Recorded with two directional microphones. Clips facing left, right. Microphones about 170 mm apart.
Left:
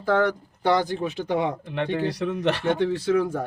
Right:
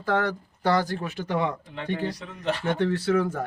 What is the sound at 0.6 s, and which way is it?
Speech, 15° left (ahead or behind).